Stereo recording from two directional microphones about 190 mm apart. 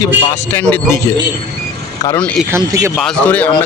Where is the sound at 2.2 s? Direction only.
5° left (ahead or behind).